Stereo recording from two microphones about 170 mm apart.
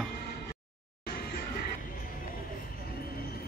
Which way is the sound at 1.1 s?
65° left (ahead or behind).